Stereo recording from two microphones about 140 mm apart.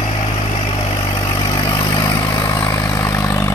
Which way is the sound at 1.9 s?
25° left (ahead or behind).